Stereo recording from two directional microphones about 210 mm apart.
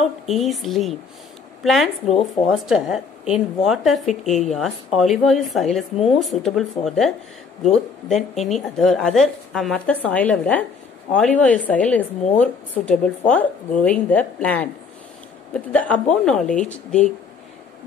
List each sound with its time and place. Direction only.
0.3 s a woman's voice: centre (ahead or behind)